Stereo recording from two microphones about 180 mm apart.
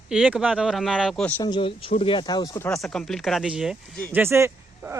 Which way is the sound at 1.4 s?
25° left (ahead or behind).